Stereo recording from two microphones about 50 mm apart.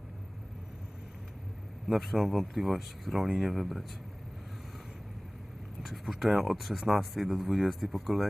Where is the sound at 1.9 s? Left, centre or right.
Centre.